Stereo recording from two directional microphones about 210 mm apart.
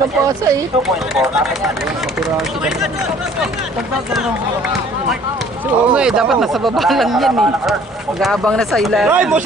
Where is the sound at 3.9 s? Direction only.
Centre (ahead or behind).